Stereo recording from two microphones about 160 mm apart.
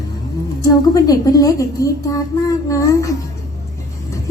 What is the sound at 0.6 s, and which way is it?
A woman's voice, 20° left (ahead or behind).